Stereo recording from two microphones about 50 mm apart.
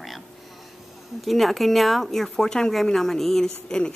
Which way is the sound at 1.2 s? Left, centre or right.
Centre.